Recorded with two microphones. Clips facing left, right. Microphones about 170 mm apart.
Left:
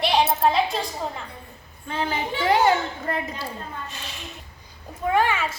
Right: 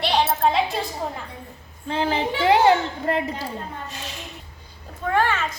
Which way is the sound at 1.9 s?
30° right (ahead or behind).